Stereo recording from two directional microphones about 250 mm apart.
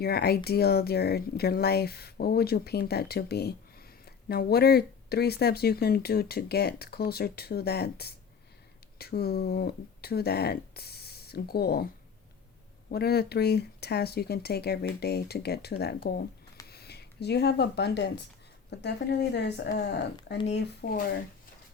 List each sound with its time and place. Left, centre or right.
0.0 s speech: left
12.9 s speech: left